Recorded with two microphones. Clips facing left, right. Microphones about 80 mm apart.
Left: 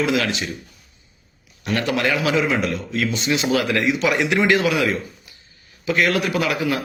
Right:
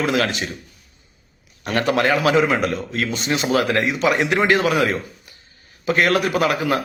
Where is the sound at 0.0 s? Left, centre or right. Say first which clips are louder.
Right 1 dB; right.